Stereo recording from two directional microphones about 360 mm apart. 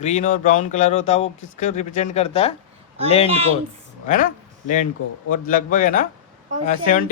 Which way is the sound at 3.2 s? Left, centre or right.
Centre.